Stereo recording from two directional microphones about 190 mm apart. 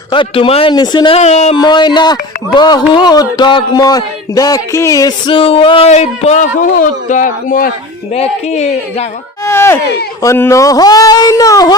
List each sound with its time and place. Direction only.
0.1 s speech: 25° left (ahead or behind)
1.5 s speech: 25° left (ahead or behind); by 7.7 s 45° left (ahead or behind)
8.1 s speech: 35° left (ahead or behind)
9.5 s speech: 15° left (ahead or behind)